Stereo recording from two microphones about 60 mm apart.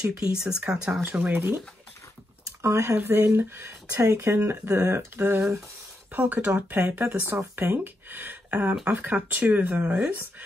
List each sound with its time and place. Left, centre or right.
0.0 s speech: centre
1.3 s speech: right
2.6 s speech: right
3.0 s speech: right
5.1 s speech: right
7.1 s speech: right